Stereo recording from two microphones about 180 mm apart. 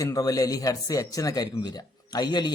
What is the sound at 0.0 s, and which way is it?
Speech, 20° left (ahead or behind).